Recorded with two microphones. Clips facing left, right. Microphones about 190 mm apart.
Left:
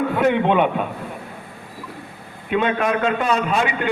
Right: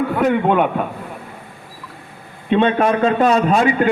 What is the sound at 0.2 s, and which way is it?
Speech, 5° right (ahead or behind).